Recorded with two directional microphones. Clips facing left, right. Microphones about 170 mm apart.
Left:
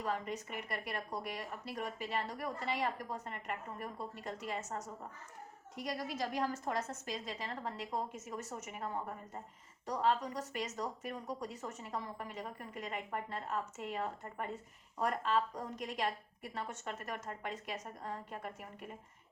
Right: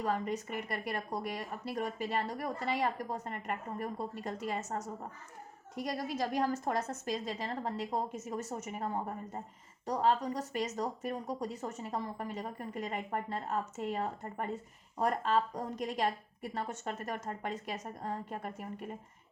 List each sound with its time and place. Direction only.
0.0 s a woman's voice: 40° right (ahead or behind)